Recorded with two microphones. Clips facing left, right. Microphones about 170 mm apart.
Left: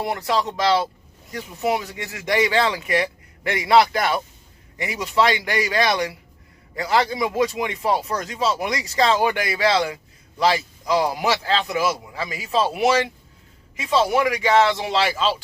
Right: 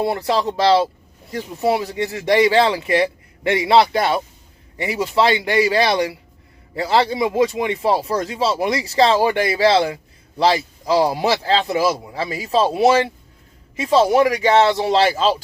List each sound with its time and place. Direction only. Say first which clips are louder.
0.0 s speech: right 4 dB; 30° right (ahead or behind)